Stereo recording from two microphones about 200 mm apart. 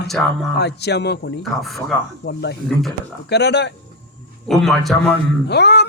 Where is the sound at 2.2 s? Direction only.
55° left (ahead or behind).